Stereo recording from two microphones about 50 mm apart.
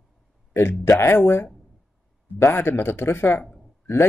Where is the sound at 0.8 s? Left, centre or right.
Left.